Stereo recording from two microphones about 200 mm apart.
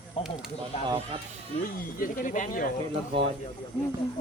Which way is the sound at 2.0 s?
40° left (ahead or behind).